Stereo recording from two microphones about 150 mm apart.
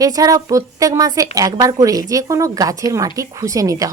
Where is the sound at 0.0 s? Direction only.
25° right (ahead or behind).